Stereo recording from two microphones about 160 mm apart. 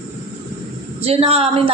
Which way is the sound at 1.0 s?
40° right (ahead or behind).